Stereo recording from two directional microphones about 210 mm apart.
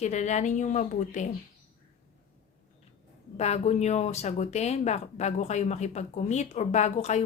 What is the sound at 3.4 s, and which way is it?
Speech, 30° left (ahead or behind).